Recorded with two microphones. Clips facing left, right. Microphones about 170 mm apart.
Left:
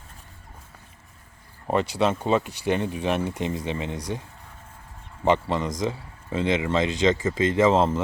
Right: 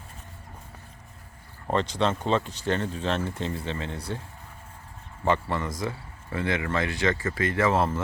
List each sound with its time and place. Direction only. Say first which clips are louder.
1.6 s speech: left 3 dB; 10° left (ahead or behind)
5.2 s speech: left 4 dB; 20° left (ahead or behind)